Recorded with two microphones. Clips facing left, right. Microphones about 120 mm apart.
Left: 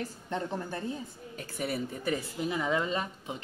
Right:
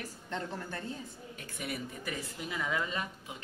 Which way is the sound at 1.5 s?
30° left (ahead or behind).